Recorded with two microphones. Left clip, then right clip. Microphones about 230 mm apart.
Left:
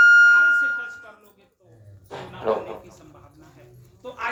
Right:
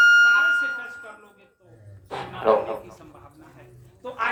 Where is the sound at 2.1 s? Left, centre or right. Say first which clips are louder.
Right 4 dB; right.